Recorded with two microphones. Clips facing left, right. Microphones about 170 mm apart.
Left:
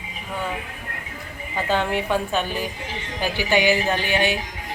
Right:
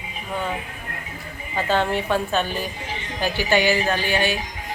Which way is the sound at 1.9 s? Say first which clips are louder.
Even; 15° left (ahead or behind).